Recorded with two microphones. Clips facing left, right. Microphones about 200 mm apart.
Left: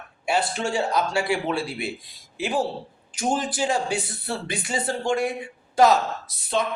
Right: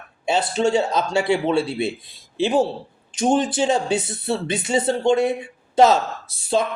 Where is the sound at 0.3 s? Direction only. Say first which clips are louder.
Right 5 dB; 20° right (ahead or behind).